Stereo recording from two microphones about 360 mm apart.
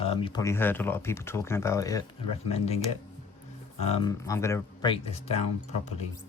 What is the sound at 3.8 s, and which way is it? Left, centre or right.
Speech, centre.